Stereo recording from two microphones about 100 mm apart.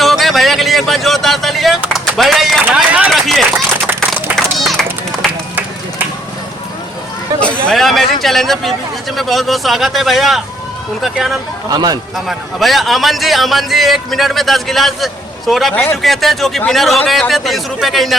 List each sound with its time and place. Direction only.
0.0 s a sound: centre (ahead or behind)
2.7 s run: 15° right (ahead or behind)
3.1 s run: centre (ahead or behind)
7.7 s a sound: centre (ahead or behind)
9.1 s a man's voice: centre (ahead or behind)
11.7 s a man's voice: 40° right (ahead or behind)
12.1 s a man's voice: centre (ahead or behind)
15.7 s speech: 20° left (ahead or behind)
16.0 s a man's voice: centre (ahead or behind)